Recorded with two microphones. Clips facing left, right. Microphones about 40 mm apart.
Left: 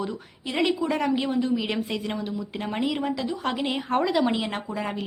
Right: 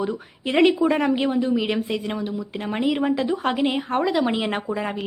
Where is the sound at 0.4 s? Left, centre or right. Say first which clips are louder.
Right 7 dB; right.